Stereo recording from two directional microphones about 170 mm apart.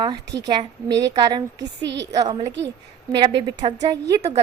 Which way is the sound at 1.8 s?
90° right.